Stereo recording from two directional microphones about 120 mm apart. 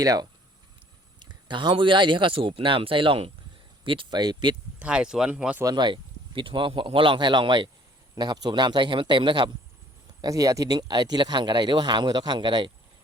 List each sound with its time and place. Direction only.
0.0 s a man's voice: 30° right (ahead or behind)
4.8 s speech: 10° right (ahead or behind)
5.6 s a man's voice: 40° right (ahead or behind)
10.2 s a man's voice: 30° right (ahead or behind)